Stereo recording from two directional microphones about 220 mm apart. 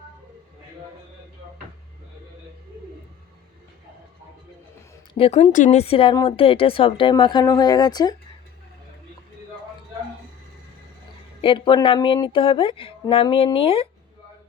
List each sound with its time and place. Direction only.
5.1 s speech: 25° left (ahead or behind)
11.3 s speech: 25° left (ahead or behind)